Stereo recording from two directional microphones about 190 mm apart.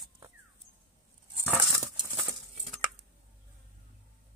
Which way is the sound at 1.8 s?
15° right (ahead or behind).